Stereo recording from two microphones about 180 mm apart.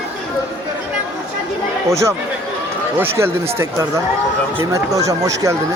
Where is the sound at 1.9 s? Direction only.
15° right (ahead or behind).